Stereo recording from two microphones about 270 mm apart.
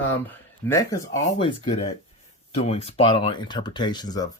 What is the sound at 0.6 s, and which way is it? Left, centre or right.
Speech, centre.